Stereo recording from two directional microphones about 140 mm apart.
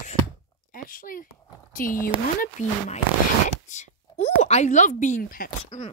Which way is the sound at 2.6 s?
60° left (ahead or behind).